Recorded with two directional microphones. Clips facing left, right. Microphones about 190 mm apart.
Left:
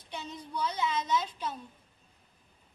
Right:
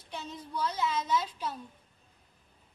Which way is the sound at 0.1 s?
Centre (ahead or behind).